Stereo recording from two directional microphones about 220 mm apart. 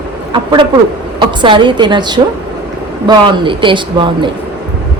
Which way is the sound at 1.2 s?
20° right (ahead or behind).